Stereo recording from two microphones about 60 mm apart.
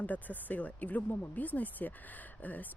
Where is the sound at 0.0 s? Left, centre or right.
Left.